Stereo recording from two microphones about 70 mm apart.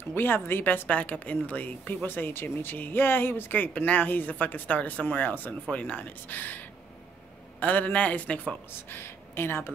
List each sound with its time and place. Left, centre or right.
0.1 s a woman's voice: left
0.8 s speech: centre
8.8 s speech: left